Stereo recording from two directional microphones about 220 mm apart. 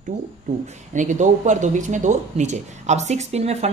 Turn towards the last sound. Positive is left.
turn(degrees=-30)  # may be behind; listen again after turning